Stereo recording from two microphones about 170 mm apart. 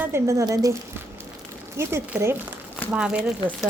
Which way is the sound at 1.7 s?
15° right (ahead or behind).